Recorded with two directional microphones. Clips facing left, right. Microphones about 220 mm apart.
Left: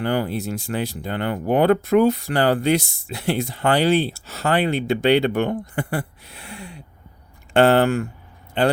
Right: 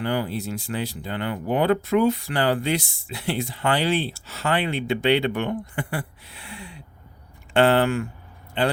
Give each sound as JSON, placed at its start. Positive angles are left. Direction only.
{"t": 0.0, "sound": "speech", "side_deg": 45}